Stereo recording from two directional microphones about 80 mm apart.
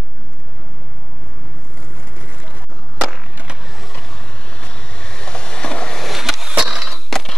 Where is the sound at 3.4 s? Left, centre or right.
Centre.